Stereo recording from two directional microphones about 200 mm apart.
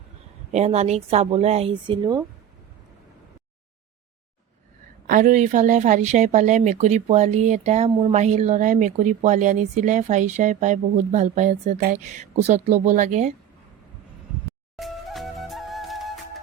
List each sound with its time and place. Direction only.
0.5 s speech: 35° right (ahead or behind)
5.0 s speech: 40° right (ahead or behind)
14.8 s music: centre (ahead or behind)